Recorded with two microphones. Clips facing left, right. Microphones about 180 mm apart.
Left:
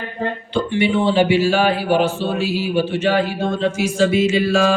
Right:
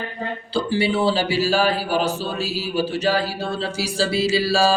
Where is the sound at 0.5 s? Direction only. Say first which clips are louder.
Left 2 dB; 35° right (ahead or behind).